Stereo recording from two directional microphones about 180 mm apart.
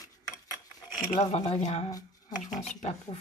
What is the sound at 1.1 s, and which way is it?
Speech, 40° left (ahead or behind).